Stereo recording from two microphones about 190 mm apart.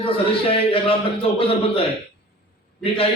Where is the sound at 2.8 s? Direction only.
30° left (ahead or behind).